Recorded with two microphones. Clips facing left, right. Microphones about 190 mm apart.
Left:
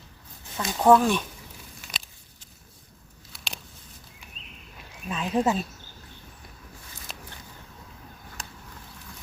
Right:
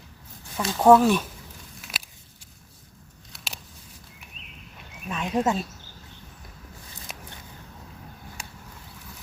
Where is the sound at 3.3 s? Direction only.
Centre (ahead or behind).